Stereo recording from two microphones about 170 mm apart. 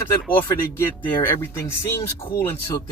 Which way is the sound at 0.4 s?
15° left (ahead or behind).